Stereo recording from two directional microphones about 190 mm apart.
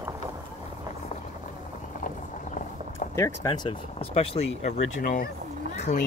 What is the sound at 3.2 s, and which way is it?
Speech, 15° left (ahead or behind).